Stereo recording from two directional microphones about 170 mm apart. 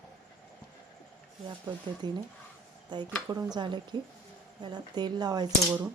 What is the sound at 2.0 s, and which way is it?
Speech, 25° right (ahead or behind).